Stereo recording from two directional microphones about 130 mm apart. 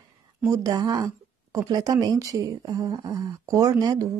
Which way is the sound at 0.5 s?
30° right (ahead or behind).